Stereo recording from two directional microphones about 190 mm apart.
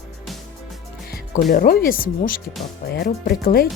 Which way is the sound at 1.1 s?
55° left (ahead or behind).